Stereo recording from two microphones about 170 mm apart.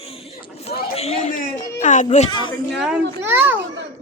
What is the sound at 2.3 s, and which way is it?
Speech, 25° left (ahead or behind).